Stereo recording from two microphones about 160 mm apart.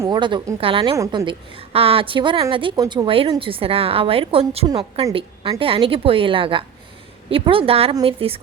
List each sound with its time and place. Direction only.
0.0 s a woman's voice: 30° right (ahead or behind)
0.9 s a woman's voice: 20° right (ahead or behind)
1.2 s a woman's voice: 35° right (ahead or behind)